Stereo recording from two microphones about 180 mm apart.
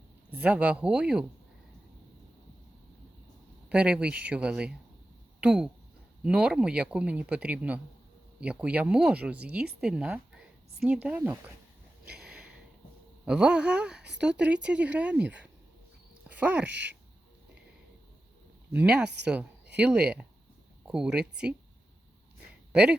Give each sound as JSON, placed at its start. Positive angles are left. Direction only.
{"t": 0.3, "sound": "speech", "side_deg": -10}
{"t": 3.7, "sound": "speech", "side_deg": -5}
{"t": 12.1, "sound": "a sound", "side_deg": -5}
{"t": 13.2, "sound": "speech", "side_deg": -5}
{"t": 16.6, "sound": "speech", "side_deg": -75}
{"t": 18.7, "sound": "speech", "side_deg": -5}
{"t": 22.7, "sound": "speech", "side_deg": -5}